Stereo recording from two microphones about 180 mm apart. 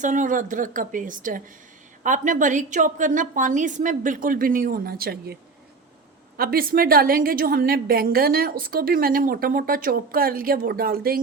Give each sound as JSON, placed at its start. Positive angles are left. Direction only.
{"t": 0.0, "sound": "a woman's voice", "side_deg": -45}